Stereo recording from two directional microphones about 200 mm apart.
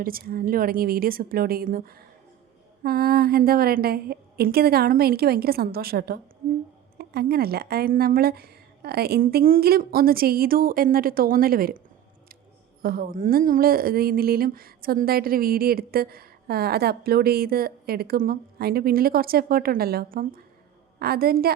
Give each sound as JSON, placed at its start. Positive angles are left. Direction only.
{"t": 0.0, "sound": "speech", "side_deg": -45}
{"t": 12.8, "sound": "speech", "side_deg": -45}